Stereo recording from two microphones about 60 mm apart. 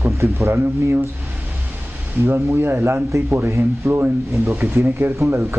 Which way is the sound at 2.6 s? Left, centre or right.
Right.